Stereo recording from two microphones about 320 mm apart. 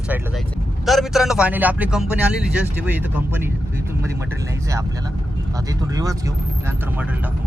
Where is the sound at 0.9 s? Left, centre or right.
Centre.